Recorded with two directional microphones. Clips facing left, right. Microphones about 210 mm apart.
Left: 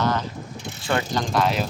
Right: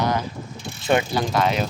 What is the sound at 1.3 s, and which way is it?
Speech, centre (ahead or behind).